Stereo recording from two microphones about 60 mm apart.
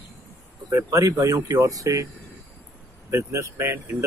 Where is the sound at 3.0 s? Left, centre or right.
Right.